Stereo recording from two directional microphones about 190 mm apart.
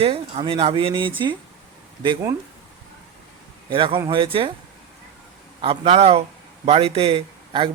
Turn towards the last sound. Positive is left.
turn(degrees=-25)  # may be behind; listen again after turning